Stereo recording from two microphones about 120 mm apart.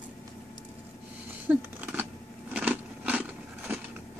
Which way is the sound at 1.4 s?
15° right (ahead or behind).